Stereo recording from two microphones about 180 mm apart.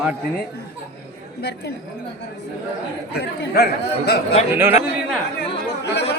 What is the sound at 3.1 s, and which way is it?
Speech, 65° left (ahead or behind).